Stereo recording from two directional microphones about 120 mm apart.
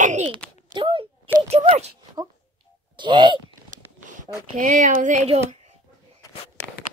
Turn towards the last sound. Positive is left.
turn(degrees=-75)  # may be behind; listen again after turning